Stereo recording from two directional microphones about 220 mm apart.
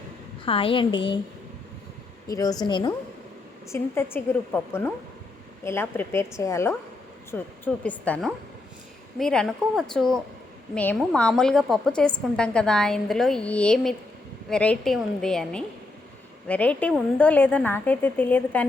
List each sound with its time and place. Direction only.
0.4 s a woman's voice: 25° left (ahead or behind)
2.2 s a woman's voice: 15° left (ahead or behind)